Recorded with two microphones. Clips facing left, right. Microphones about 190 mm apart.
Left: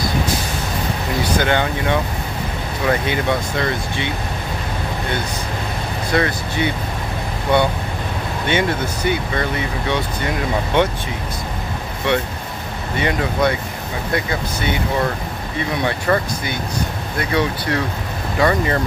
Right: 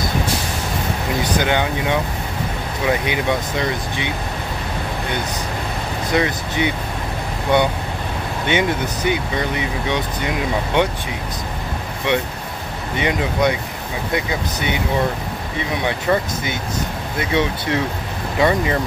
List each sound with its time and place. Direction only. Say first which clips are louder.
1.2 s speech: left 1 dB; 15° right (ahead or behind)
6.1 s speech: even; 15° right (ahead or behind)
12.1 s speech: left 1 dB; 20° right (ahead or behind)
16.1 s speech: right 1 dB; 10° right (ahead or behind)